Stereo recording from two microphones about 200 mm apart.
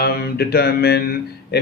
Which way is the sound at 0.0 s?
50° left (ahead or behind).